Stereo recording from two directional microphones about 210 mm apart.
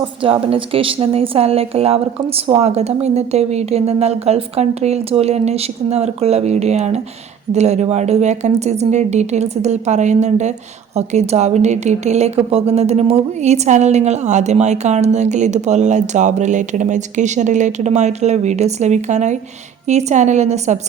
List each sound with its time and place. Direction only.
0.2 s a woman's voice: 25° right (ahead or behind)